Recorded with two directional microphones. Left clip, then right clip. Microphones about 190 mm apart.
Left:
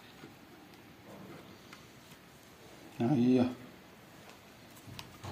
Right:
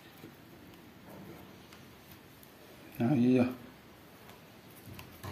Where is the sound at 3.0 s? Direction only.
15° right (ahead or behind).